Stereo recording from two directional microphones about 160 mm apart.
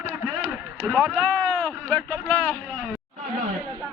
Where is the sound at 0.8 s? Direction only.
5° left (ahead or behind).